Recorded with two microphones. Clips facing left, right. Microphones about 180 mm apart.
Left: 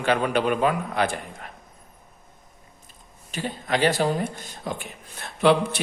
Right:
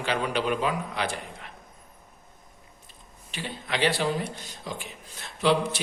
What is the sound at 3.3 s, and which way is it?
Speech, 45° left (ahead or behind).